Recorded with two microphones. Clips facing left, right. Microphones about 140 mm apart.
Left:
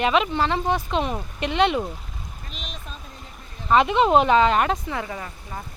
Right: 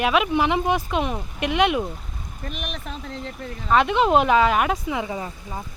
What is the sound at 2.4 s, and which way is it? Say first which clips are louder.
Speech: right 9 dB; 60° right (ahead or behind).